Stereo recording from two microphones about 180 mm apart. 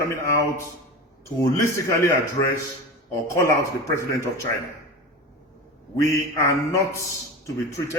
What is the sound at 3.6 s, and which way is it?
Speech, 15° left (ahead or behind).